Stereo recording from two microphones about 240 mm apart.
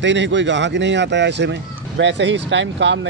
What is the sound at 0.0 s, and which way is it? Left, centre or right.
Speech, right.